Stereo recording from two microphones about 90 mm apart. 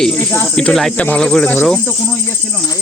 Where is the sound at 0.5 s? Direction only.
5° left (ahead or behind).